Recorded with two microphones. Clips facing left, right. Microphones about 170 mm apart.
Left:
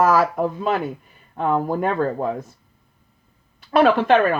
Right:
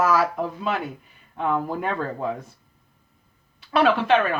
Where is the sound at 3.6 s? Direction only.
45° left (ahead or behind).